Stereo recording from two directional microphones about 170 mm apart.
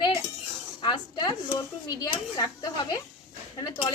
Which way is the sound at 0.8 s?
25° left (ahead or behind).